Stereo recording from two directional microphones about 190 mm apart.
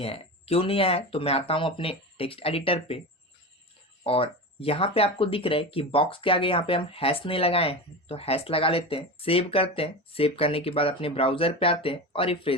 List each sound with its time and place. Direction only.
0.0 s speech: 30° left (ahead or behind)
4.0 s speech: 30° left (ahead or behind)